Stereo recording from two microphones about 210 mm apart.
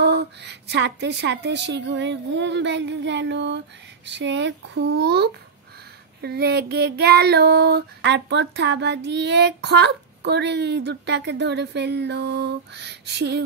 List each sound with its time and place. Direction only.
0.0 s a woman's voice: 55° right (ahead or behind)
6.2 s child singing: 50° right (ahead or behind)